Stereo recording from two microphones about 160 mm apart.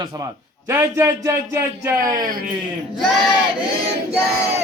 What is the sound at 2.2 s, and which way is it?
Speech, 60° right (ahead or behind).